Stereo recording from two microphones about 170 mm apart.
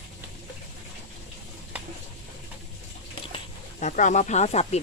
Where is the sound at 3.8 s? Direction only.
45° left (ahead or behind).